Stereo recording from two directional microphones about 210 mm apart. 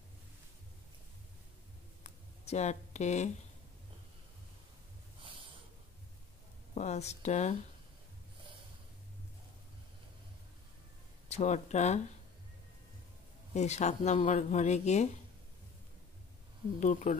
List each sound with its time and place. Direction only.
2.0 s a sound: 35° left (ahead or behind)
6.7 s speech: 30° left (ahead or behind)
11.2 s speech: 35° left (ahead or behind)
13.6 s speech: 30° left (ahead or behind)
16.8 s speech: 35° left (ahead or behind)